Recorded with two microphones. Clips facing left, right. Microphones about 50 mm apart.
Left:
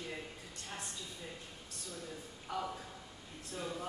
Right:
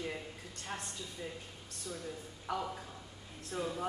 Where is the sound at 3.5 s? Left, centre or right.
Right.